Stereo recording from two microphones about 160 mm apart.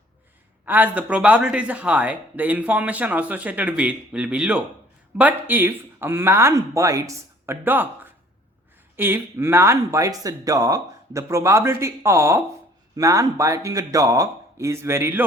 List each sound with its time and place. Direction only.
0.6 s speech: 10° right (ahead or behind)
9.0 s speech: 15° right (ahead or behind)